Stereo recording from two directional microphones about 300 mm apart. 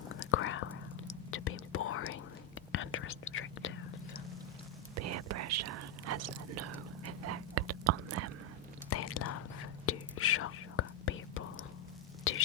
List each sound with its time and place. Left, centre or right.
0.3 s whispering: left
4.9 s whispering: right
8.9 s whispering: left